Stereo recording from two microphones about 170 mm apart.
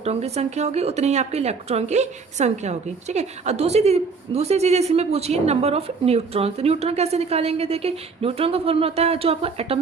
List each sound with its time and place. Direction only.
0.0 s speech: 40° right (ahead or behind)